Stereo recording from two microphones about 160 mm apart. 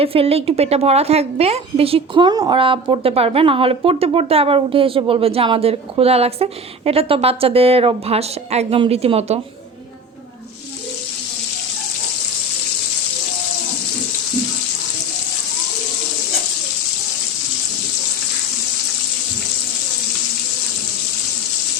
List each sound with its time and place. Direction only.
0.0 s a woman's voice: 35° right (ahead or behind)